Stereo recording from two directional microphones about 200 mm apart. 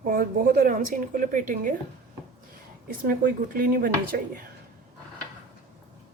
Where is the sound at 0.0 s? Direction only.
45° right (ahead or behind).